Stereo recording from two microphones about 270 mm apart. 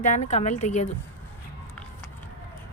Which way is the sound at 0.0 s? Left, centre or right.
Left.